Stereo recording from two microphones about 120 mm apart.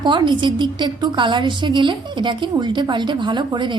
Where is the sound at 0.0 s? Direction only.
40° right (ahead or behind).